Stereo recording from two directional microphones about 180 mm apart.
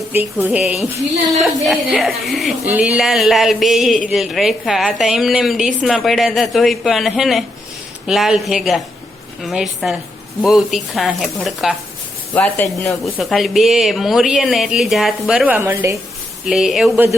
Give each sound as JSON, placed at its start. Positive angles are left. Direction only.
{"t": 0.1, "sound": "a woman's voice", "side_deg": -10}
{"t": 12.3, "sound": "speech", "side_deg": 10}
{"t": 13.1, "sound": "a woman's voice", "side_deg": 0}
{"t": 16.5, "sound": "a woman's voice", "side_deg": 0}